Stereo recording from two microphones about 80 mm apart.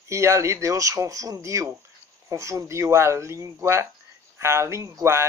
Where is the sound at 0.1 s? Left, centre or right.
Right.